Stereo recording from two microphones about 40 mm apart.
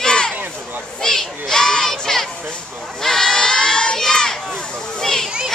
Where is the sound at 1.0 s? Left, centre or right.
Centre.